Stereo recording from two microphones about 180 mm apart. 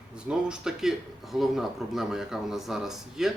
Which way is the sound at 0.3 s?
5° right (ahead or behind).